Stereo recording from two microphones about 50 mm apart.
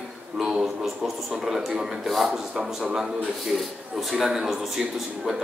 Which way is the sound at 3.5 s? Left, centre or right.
Centre.